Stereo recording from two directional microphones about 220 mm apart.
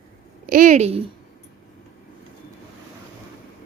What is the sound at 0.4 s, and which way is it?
Speech, 40° right (ahead or behind).